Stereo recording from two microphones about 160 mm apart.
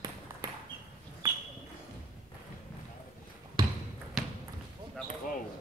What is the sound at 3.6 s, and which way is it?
Basketball bounce, 25° right (ahead or behind).